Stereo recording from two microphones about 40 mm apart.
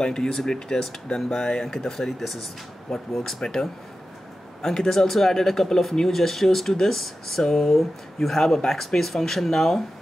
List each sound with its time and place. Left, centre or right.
0.0 s speech: centre
2.9 s speech: centre